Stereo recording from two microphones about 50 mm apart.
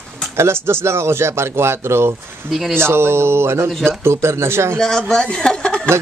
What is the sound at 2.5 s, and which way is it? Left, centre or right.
Speech, centre.